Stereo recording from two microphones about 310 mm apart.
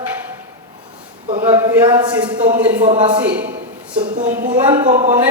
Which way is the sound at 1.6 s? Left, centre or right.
Centre.